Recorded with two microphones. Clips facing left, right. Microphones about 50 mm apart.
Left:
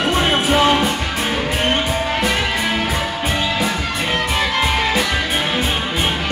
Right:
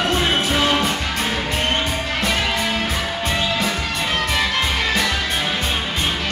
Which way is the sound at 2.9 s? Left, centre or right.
Centre.